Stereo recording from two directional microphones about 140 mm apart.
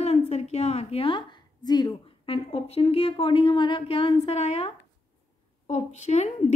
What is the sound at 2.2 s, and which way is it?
A woman's voice, 45° left (ahead or behind).